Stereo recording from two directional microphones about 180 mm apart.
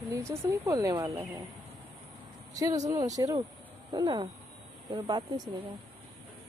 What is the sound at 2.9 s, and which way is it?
Speech, 20° right (ahead or behind).